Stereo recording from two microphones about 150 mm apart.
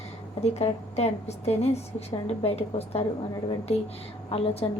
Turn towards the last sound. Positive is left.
turn(degrees=40)  # may be behind; listen again after turning